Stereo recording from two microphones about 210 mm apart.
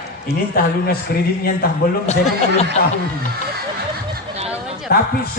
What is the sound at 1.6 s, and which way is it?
Speech, 45° left (ahead or behind).